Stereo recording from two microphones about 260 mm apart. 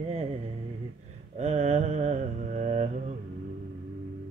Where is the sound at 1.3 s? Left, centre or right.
Right.